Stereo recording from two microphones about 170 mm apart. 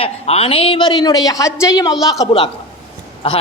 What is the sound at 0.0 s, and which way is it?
A man's voice, 35° left (ahead or behind).